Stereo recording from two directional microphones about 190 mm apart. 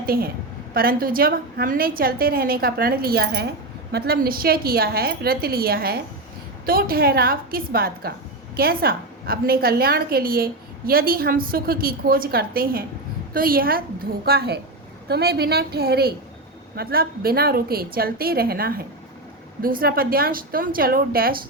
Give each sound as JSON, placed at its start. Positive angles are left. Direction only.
{"t": 0.0, "sound": "a woman's voice", "side_deg": -50}